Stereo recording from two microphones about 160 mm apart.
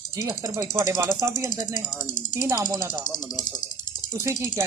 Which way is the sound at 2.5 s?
25° right (ahead or behind).